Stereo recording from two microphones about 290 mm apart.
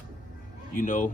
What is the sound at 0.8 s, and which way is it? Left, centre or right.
Speech, left.